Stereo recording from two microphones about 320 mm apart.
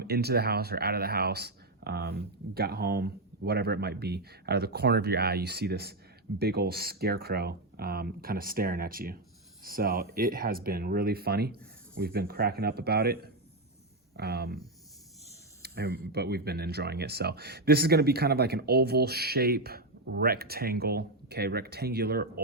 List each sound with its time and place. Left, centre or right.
0.0 s speech: right
15.6 s speech: right